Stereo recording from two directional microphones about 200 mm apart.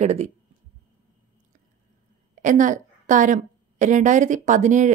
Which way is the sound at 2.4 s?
40° right (ahead or behind).